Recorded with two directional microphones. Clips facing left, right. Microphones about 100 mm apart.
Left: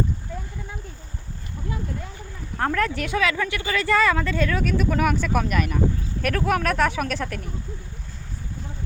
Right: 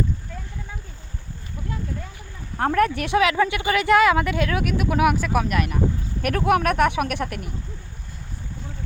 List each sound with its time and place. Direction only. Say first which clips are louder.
2.7 s speech: right 7 dB; 20° right (ahead or behind); by 5.8 s 5° right (ahead or behind)
6.3 s speech: right 4 dB; 25° right (ahead or behind)